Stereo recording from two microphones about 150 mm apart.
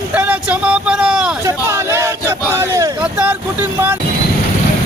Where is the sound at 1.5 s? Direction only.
20° right (ahead or behind).